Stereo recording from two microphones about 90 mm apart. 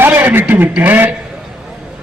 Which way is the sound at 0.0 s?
20° right (ahead or behind).